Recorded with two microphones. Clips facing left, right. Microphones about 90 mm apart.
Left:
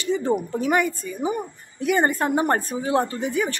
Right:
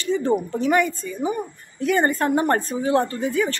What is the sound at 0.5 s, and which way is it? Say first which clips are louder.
A woman's voice: right 2 dB; 15° left (ahead or behind).